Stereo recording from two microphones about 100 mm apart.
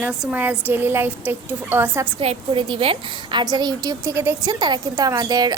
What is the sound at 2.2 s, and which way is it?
Speech, 90° right.